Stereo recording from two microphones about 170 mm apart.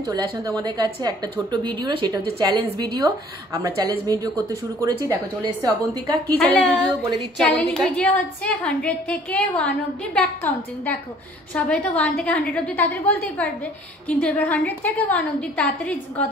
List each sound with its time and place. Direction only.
0.0 s a woman's voice: 20° right (ahead or behind)
6.2 s a woman's voice: 5° left (ahead or behind)